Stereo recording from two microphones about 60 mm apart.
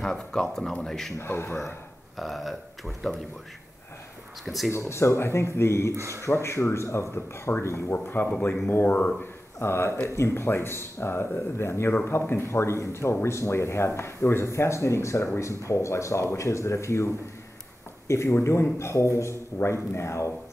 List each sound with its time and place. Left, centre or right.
0.0 s speech: centre
1.1 s speech: left
2.1 s speech: centre
4.7 s speech: left
5.9 s a man's voice: right
6.2 s speech: left
7.5 s speech: left
9.6 s speech: left